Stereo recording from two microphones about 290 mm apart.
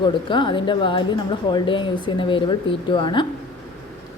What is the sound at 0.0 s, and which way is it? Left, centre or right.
A woman's voice, centre.